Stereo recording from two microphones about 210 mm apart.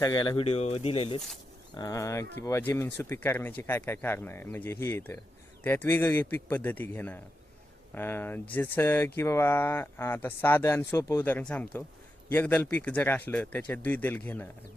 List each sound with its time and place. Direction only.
0.0 s speech: 20° left (ahead or behind)